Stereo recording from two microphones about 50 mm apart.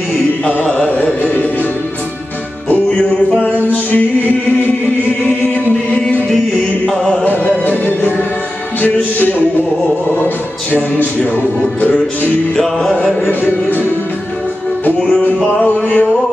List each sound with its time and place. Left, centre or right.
0.7 s carnatic music: left
3.5 s music: left
6.9 s music: centre
7.2 s music: left
12.5 s music: centre
13.3 s music: left
15.6 s music: left